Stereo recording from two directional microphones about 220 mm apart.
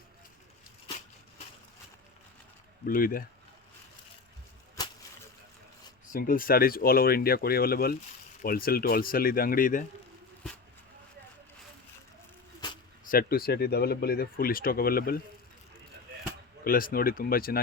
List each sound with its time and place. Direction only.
2.8 s speech: 40° left (ahead or behind)
6.1 s speech: 40° left (ahead or behind)
12.5 s keys jangling: 20° left (ahead or behind)
13.1 s speech: 40° left (ahead or behind)
16.6 s speech: 40° left (ahead or behind)